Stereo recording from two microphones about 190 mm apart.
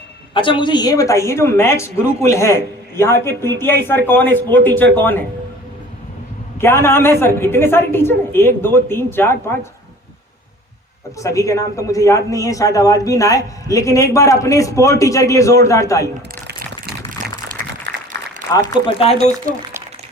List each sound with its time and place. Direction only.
0.3 s a man's voice: 25° left (ahead or behind); by 4.9 s 10° left (ahead or behind)
6.6 s a man's voice: 15° left (ahead or behind)
11.2 s a man's voice: 15° left (ahead or behind)
16.5 s a sound: 55° right (ahead or behind)
17.9 s applause: 15° left (ahead or behind)
18.7 s speech: 30° left (ahead or behind)